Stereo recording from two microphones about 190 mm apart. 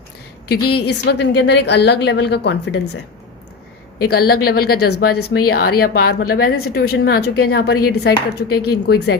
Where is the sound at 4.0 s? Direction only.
55° left (ahead or behind).